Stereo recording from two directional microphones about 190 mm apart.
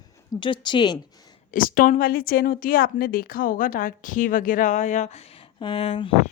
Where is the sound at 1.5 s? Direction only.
50° left (ahead or behind); by 6.3 s 30° left (ahead or behind).